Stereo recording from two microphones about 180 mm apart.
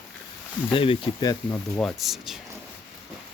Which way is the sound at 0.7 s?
30° left (ahead or behind).